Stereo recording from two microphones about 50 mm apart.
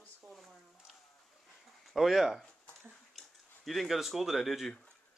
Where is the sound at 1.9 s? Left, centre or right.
Centre.